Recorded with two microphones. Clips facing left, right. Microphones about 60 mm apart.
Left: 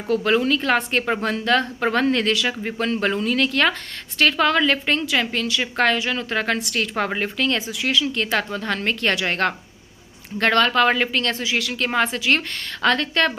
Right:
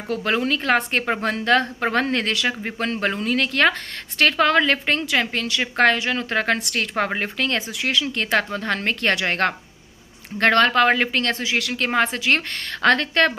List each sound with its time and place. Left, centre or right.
0.1 s speech: right